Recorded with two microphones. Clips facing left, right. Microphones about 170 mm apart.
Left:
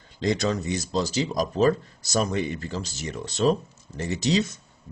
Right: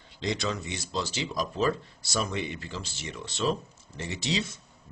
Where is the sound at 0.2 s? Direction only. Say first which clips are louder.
Left 6 dB; 45° left (ahead or behind).